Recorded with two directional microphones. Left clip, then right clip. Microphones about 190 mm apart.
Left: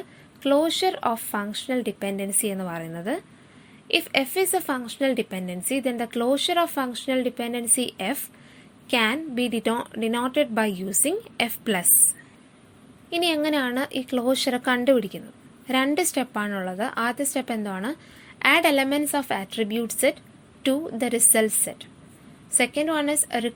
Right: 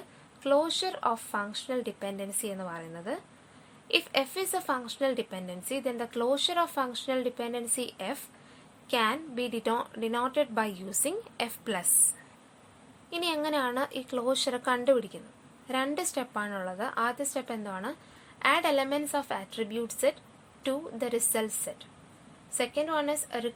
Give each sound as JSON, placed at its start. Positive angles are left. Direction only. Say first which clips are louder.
{"t": 0.4, "sound": "a woman's voice", "louder": "left 6 dB", "side_deg": 15}
{"t": 13.1, "sound": "a woman's voice", "louder": "left 7 dB", "side_deg": 10}